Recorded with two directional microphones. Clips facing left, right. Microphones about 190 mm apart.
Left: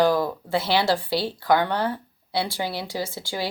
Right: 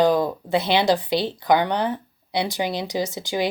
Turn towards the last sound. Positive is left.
turn(degrees=-20)  # may be behind; listen again after turning